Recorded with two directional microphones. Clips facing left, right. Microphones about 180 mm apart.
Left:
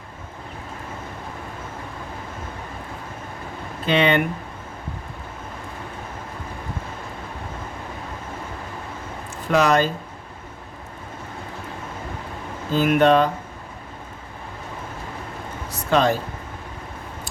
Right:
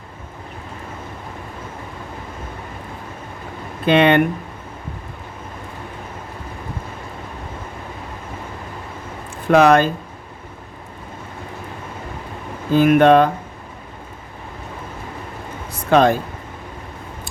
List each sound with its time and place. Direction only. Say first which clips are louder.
3.8 s speech: right 5 dB; 55° right (ahead or behind)
9.5 s speech: right 6 dB; 55° right (ahead or behind)
12.7 s speech: right 5 dB; 55° right (ahead or behind)
15.9 s speech: right 5 dB; 55° right (ahead or behind)